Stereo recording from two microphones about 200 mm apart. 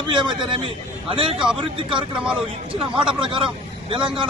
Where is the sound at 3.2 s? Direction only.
25° right (ahead or behind).